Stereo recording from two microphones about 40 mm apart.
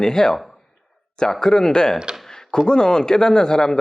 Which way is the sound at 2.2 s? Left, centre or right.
Centre.